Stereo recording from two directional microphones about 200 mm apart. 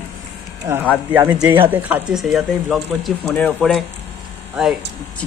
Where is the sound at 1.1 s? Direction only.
10° right (ahead or behind).